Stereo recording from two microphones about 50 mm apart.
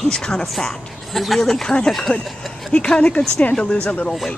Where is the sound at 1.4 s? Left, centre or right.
Centre.